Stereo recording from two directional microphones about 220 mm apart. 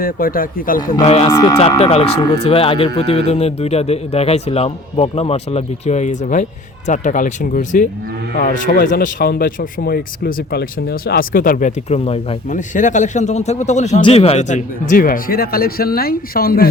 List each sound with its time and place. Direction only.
0.0 s speech: 40° left (ahead or behind)
0.8 s speech: 15° left (ahead or behind); by 16.6 s 40° left (ahead or behind)